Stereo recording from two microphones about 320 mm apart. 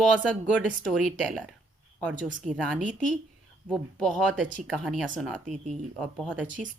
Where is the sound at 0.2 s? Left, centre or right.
Centre.